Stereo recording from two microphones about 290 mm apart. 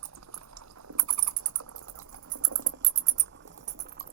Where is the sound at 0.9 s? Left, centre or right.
Right.